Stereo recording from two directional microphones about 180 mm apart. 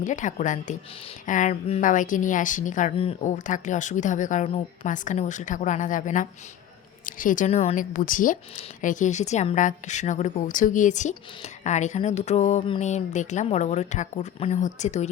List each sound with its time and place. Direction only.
0.0 s speech: 45° left (ahead or behind)
7.9 s a woman's voice: 50° left (ahead or behind)